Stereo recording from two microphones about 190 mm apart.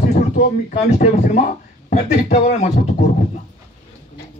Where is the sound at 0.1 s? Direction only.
40° left (ahead or behind).